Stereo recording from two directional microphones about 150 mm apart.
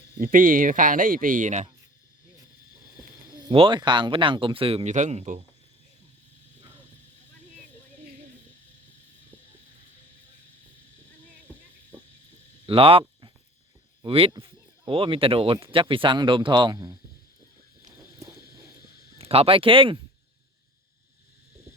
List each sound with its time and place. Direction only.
0.2 s speech: 65° right (ahead or behind)
3.4 s speech: 35° right (ahead or behind); by 5.4 s 55° right (ahead or behind)
12.6 s a sound: 35° right (ahead or behind)
14.0 s speech: 35° right (ahead or behind)
19.2 s speech: 40° right (ahead or behind)